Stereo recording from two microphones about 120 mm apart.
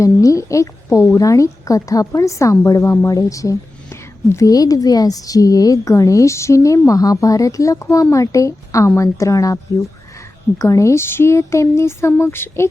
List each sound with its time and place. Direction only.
0.0 s a woman's voice: 25° left (ahead or behind)